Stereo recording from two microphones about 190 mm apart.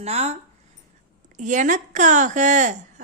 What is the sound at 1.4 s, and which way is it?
A woman's voice, 40° right (ahead or behind).